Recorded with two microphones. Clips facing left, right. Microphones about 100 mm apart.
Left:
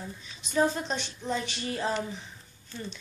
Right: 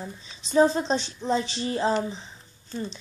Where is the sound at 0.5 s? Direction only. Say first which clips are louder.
Right 6 dB; 25° right (ahead or behind).